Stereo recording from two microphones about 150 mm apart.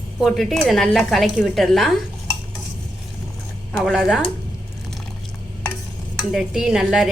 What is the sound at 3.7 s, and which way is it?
Speech, centre (ahead or behind).